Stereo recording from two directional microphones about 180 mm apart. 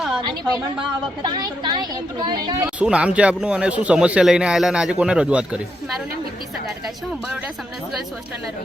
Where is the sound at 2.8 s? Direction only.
5° right (ahead or behind).